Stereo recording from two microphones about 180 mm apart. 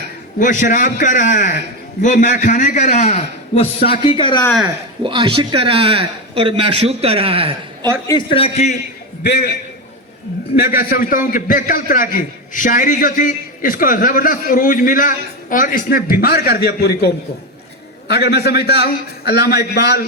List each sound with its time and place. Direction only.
0.3 s a man's voice: 45° left (ahead or behind); by 4.4 s 25° left (ahead or behind)
5.0 s a man's voice: 25° right (ahead or behind)
8.0 s a man's voice: 25° left (ahead or behind)
9.2 s a man's voice: 65° left (ahead or behind)
10.5 s a man's voice: 55° left (ahead or behind)
18.1 s a man's voice: 65° left (ahead or behind)